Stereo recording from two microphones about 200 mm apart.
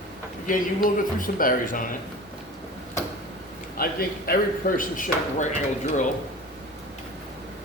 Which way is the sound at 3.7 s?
45° left (ahead or behind).